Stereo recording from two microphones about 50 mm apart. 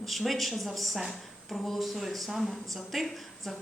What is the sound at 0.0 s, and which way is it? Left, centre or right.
A woman's voice, centre.